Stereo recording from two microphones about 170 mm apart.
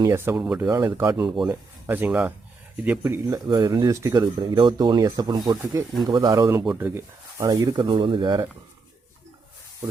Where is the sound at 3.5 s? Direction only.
25° right (ahead or behind).